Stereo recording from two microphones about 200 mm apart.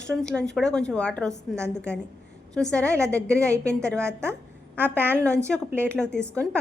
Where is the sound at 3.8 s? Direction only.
5° left (ahead or behind).